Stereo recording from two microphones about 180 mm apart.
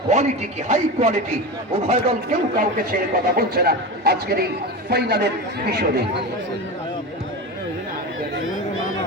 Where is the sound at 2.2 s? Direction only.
50° right (ahead or behind).